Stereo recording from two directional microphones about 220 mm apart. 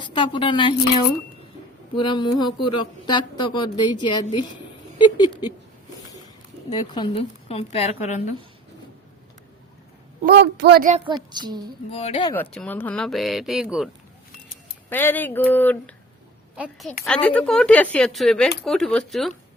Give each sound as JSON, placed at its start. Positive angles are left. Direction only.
{"t": 0.0, "sound": "speech", "side_deg": 20}
{"t": 6.7, "sound": "speech", "side_deg": 20}
{"t": 10.2, "sound": "speech", "side_deg": -50}
{"t": 11.1, "sound": "child singing", "side_deg": -20}
{"t": 11.9, "sound": "speech", "side_deg": 25}
{"t": 12.3, "sound": "a woman's voice", "side_deg": 5}
{"t": 14.8, "sound": "speech", "side_deg": 10}
{"t": 16.6, "sound": "a woman's voice", "side_deg": 0}